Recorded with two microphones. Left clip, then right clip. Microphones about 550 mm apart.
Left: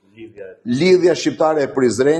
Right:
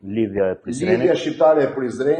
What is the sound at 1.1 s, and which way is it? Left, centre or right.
Speech, left.